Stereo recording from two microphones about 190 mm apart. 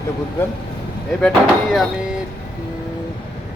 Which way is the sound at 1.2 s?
Centre (ahead or behind).